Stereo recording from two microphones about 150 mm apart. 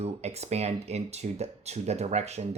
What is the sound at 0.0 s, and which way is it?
Speech, 45° right (ahead or behind).